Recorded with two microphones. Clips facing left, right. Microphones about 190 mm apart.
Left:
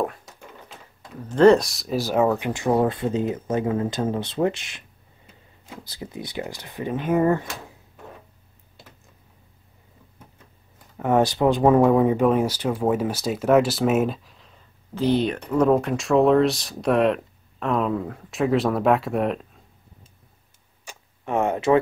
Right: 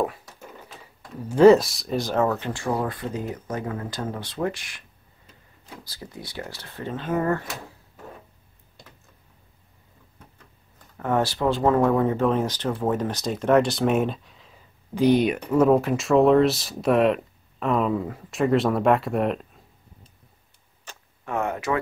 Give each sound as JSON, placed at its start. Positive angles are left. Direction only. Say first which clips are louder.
{"t": 1.2, "sound": "speech", "louder": "right 1 dB", "side_deg": -10}
{"t": 5.9, "sound": "speech", "louder": "left 6 dB", "side_deg": 20}
{"t": 11.0, "sound": "speech", "louder": "left 4 dB", "side_deg": 15}
{"t": 15.0, "sound": "speech", "louder": "right 2 dB", "side_deg": -15}
{"t": 20.9, "sound": "tick-tock", "louder": "left 2 dB", "side_deg": 10}
{"t": 21.3, "sound": "speech", "louder": "left 6 dB", "side_deg": 25}